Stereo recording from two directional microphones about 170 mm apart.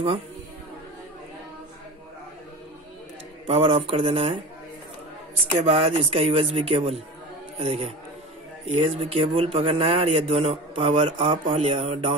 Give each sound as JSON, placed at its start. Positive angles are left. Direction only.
{"t": 3.4, "sound": "speech", "side_deg": -35}
{"t": 5.6, "sound": "speech", "side_deg": -40}